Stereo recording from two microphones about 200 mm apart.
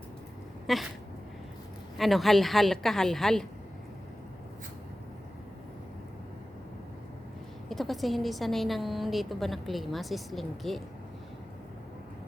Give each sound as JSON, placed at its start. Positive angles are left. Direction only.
{"t": 0.7, "sound": "a woman's voice", "side_deg": 0}
{"t": 2.0, "sound": "a woman's voice", "side_deg": 0}
{"t": 7.7, "sound": "a woman's voice", "side_deg": 0}